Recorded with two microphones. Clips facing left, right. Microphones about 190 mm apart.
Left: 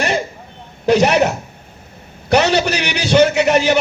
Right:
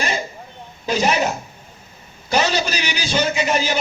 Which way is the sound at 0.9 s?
70° left (ahead or behind).